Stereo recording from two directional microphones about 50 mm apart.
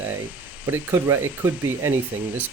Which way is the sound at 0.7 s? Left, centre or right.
Right.